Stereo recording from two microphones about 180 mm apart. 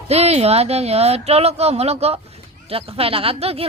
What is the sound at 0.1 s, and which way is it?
Speech, 35° right (ahead or behind).